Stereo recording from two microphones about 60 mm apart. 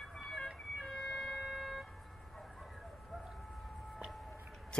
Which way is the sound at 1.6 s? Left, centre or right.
Centre.